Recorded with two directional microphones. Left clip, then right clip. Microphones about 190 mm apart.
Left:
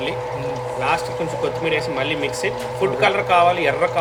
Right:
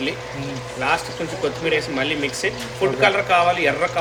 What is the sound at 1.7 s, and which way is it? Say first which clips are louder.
Speech: right 1 dB; 25° left (ahead or behind).